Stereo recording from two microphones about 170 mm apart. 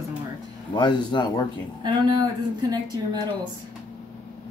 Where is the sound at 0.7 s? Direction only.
25° left (ahead or behind).